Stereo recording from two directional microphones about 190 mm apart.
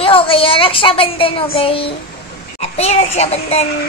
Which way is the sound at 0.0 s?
30° left (ahead or behind).